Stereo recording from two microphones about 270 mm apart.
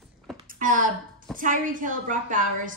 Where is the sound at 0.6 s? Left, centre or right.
Right.